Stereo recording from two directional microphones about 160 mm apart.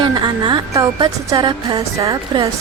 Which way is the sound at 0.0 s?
30° right (ahead or behind).